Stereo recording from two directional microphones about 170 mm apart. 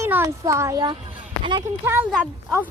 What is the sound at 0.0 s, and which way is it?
Speech, 15° right (ahead or behind).